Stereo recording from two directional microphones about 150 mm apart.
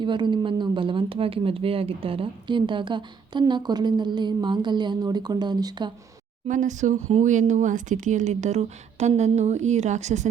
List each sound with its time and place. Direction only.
0.0 s speech: 30° right (ahead or behind)
6.5 s speech: 55° right (ahead or behind)